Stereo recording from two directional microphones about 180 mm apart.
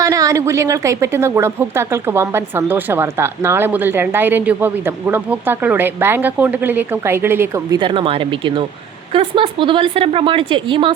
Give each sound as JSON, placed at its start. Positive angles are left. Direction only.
{"t": 0.0, "sound": "a woman's voice", "side_deg": -20}